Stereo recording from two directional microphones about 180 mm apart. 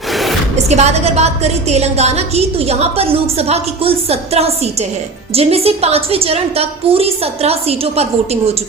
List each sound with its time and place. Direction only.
0.7 s a woman's voice: 35° right (ahead or behind)